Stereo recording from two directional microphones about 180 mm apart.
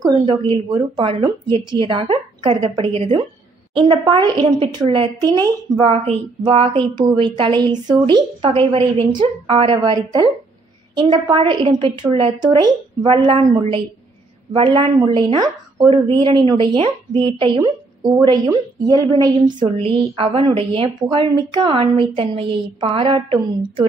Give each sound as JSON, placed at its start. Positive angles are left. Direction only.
{"t": 0.0, "sound": "a woman's voice", "side_deg": -25}